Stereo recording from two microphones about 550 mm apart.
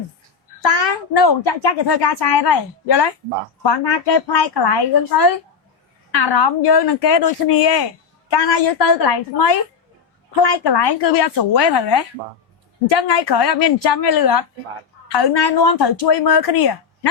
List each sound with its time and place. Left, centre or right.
0.6 s a child's voice: left